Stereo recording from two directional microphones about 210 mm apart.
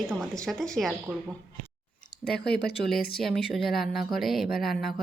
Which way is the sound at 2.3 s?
50° left (ahead or behind).